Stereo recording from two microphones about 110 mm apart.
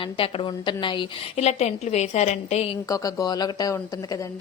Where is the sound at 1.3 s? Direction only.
75° left (ahead or behind).